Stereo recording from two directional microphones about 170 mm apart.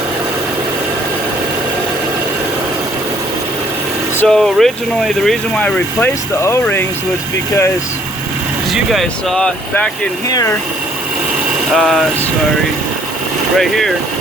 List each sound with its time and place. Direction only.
4.2 s speech: centre (ahead or behind)
8.7 s speech: centre (ahead or behind)
10.2 s speech: 20° left (ahead or behind)
11.7 s speech: centre (ahead or behind)
13.6 s speech: centre (ahead or behind)